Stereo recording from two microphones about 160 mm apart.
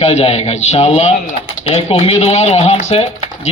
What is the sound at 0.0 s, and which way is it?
Speech, 40° left (ahead or behind).